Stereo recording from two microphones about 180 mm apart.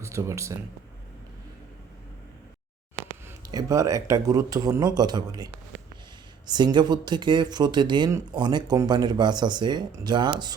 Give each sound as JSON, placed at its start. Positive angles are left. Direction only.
{"t": 0.0, "sound": "speech", "side_deg": -15}
{"t": 3.2, "sound": "speech", "side_deg": -20}
{"t": 6.5, "sound": "speech", "side_deg": -25}